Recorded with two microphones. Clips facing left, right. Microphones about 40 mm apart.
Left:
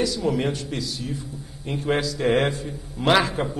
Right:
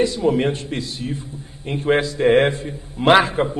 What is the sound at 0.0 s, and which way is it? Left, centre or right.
A man's voice, right.